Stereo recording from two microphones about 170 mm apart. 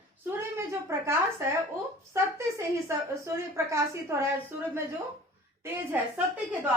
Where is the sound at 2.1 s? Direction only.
15° right (ahead or behind).